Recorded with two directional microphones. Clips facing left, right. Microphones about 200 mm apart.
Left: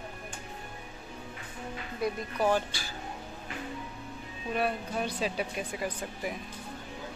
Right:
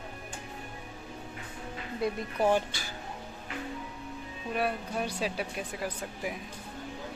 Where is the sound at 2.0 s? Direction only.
25° right (ahead or behind).